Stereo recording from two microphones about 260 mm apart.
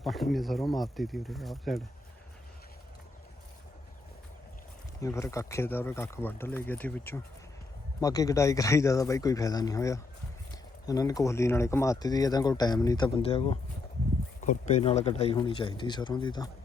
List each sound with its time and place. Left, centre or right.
0.0 s speech: centre
4.9 s speech: centre